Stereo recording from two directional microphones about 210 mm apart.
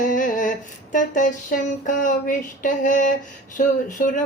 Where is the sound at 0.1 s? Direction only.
40° left (ahead or behind).